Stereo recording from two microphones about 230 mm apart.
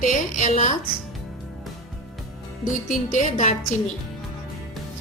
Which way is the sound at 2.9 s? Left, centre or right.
Left.